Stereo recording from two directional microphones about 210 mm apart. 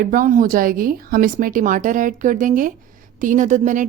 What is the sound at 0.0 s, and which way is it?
Speech, 40° right (ahead or behind).